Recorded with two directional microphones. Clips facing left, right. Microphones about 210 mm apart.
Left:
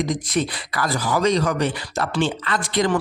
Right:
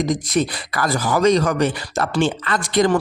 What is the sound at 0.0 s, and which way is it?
Speech, 40° right (ahead or behind).